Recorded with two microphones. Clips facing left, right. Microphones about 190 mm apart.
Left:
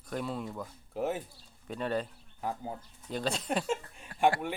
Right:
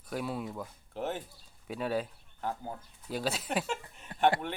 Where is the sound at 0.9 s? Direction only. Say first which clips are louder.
Left 3 dB; 10° left (ahead or behind).